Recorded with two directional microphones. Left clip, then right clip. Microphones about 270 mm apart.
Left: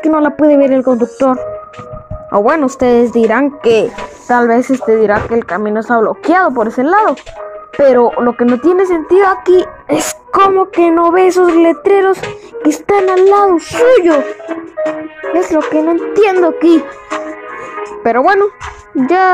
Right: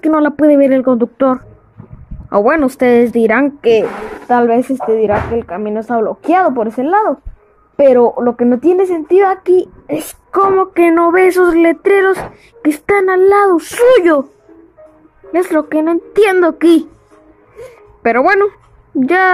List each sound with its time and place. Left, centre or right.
0.0 s music: centre
4.3 s speech: centre
9.3 s child singing: centre
10.5 s music: centre
15.3 s music: centre
18.0 s music: centre